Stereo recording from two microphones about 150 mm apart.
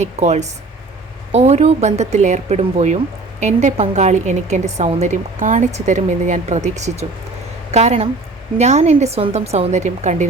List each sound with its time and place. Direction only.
0.0 s a woman's voice: 50° right (ahead or behind)